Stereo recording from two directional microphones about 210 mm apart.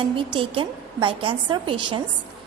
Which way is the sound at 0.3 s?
25° right (ahead or behind).